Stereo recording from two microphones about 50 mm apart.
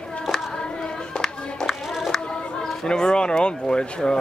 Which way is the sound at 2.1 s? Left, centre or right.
Centre.